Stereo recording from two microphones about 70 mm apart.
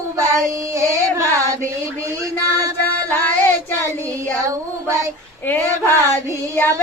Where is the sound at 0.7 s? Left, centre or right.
Right.